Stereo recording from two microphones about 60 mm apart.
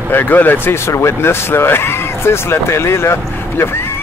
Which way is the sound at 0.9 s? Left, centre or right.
Left.